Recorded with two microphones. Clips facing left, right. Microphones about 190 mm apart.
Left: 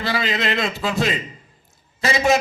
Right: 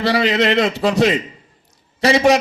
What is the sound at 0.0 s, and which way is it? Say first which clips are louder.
A man's voice: right 7 dB; 70° right (ahead or behind).